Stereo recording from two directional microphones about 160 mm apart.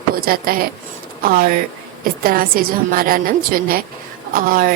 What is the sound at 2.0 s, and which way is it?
A woman's voice, 65° right (ahead or behind).